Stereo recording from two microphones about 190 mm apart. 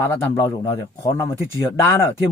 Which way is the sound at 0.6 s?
15° left (ahead or behind).